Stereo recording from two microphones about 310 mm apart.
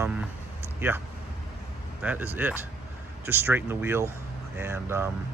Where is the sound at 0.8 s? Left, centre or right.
Centre.